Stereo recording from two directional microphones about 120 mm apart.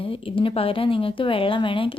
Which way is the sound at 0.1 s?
50° left (ahead or behind).